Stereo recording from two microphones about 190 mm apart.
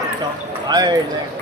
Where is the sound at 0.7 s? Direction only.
20° right (ahead or behind).